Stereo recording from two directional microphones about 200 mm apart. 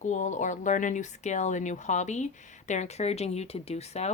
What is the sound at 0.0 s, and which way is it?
Speech, 40° left (ahead or behind).